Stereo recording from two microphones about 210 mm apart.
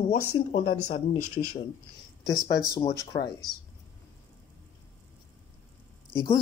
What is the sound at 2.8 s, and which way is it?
Speech, 20° left (ahead or behind).